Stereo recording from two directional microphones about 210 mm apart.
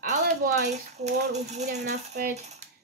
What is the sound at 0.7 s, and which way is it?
A child's voice, 35° right (ahead or behind).